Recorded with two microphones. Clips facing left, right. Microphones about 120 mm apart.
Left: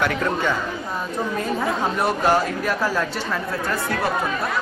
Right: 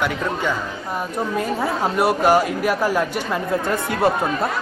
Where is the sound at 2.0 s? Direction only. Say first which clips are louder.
Right 5 dB; 10° right (ahead or behind).